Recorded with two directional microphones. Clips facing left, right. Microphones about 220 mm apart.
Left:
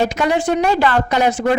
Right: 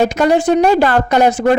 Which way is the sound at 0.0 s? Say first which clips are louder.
Right 5 dB; 45° right (ahead or behind).